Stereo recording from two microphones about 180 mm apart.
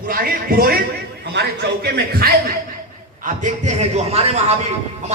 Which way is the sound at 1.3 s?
70° right (ahead or behind).